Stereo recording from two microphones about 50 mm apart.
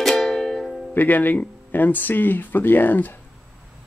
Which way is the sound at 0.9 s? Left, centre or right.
Left.